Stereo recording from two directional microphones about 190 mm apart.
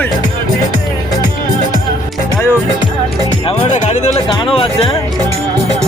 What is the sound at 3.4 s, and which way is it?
Music, 35° left (ahead or behind).